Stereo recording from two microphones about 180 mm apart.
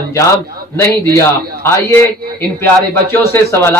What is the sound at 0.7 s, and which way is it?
Speech, 15° left (ahead or behind).